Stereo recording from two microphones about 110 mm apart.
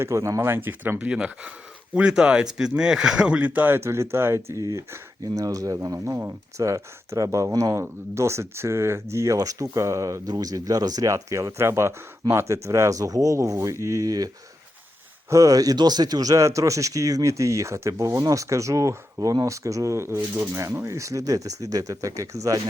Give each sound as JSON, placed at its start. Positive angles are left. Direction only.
{"t": 0.0, "sound": "speech", "side_deg": -25}
{"t": 15.3, "sound": "speech", "side_deg": -30}